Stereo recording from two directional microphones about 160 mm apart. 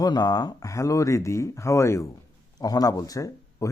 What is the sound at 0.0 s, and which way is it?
Speech, 25° left (ahead or behind).